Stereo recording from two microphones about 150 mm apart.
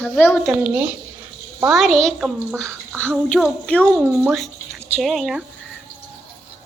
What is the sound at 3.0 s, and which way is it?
A child's voice, 10° left (ahead or behind).